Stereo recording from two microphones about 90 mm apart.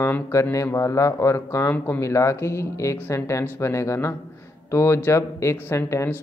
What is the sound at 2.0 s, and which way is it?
Speech, 35° left (ahead or behind).